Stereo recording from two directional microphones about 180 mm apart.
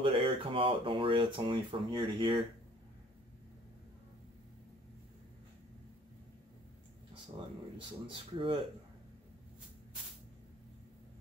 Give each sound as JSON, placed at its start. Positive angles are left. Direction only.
{"t": 0.0, "sound": "speech", "side_deg": -30}
{"t": 8.4, "sound": "speech", "side_deg": -30}